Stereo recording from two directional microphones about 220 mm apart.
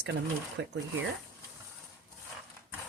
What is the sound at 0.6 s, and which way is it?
Speech, 55° right (ahead or behind).